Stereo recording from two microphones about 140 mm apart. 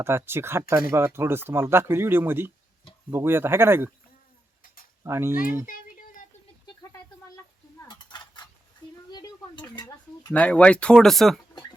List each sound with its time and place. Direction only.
0.0 s speech: 15° right (ahead or behind)
5.0 s speech: 20° right (ahead or behind)
5.6 s a sound: 75° left (ahead or behind)
7.9 s cutlery: 30° left (ahead or behind)
9.1 s a sound: 30° left (ahead or behind)
10.3 s speech: 10° left (ahead or behind)